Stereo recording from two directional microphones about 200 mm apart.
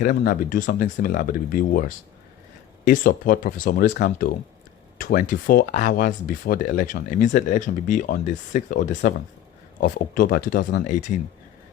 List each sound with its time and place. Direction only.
0.0 s speech: 40° left (ahead or behind)
2.8 s speech: 45° left (ahead or behind)